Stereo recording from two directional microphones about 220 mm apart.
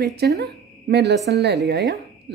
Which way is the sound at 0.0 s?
45° right (ahead or behind).